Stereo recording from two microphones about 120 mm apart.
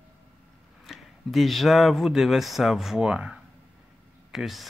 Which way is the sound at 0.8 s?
Centre (ahead or behind).